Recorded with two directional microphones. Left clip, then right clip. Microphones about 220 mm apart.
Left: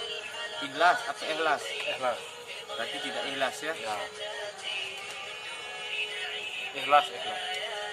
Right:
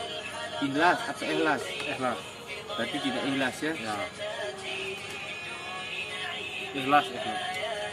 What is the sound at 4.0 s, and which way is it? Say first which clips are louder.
Music: right 2 dB; 10° right (ahead or behind).